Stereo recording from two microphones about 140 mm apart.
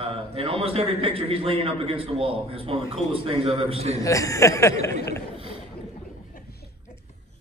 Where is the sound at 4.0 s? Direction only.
25° left (ahead or behind).